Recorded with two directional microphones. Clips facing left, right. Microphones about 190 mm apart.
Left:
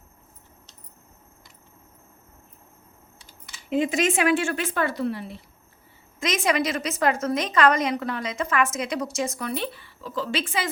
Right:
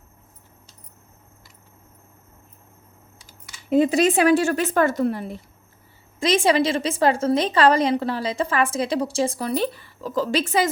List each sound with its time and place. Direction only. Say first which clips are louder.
3.7 s a woman's voice: right 5 dB; 40° right (ahead or behind)
6.1 s a woman's voice: right 5 dB; 30° right (ahead or behind)